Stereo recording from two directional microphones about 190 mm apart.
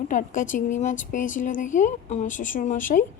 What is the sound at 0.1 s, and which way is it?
Speech, 40° left (ahead or behind).